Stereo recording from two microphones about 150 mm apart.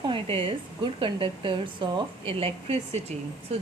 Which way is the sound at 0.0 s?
35° right (ahead or behind).